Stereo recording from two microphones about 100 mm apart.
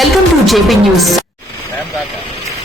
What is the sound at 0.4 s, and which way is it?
Speech, centre (ahead or behind).